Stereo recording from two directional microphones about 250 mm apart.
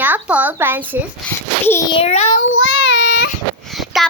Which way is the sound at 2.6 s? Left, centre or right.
Left.